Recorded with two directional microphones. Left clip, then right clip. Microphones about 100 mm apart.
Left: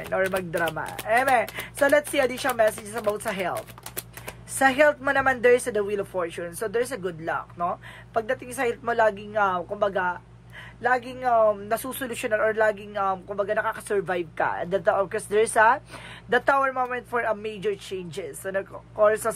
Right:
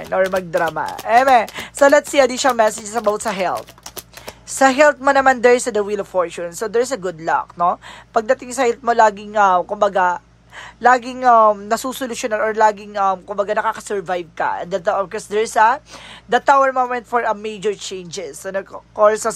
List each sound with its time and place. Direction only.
0.0 s speech: 35° right (ahead or behind)
16.3 s speech: 30° right (ahead or behind)